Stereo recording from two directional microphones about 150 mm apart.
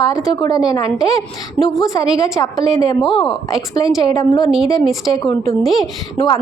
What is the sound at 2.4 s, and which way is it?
Speech, 20° left (ahead or behind).